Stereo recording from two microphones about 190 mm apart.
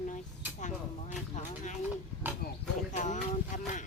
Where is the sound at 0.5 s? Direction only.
40° left (ahead or behind).